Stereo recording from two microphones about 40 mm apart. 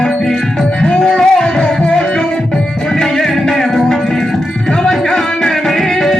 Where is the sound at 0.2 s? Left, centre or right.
Centre.